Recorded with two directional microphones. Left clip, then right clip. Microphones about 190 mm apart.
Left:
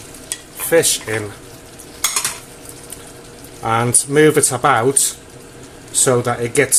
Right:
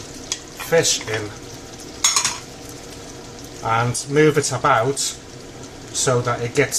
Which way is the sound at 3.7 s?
50° left (ahead or behind).